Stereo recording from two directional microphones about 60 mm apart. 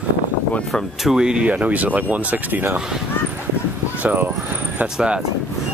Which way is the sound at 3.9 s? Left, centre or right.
Right.